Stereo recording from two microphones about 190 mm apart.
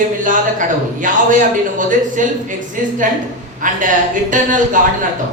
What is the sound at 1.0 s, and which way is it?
A man's voice, 45° right (ahead or behind).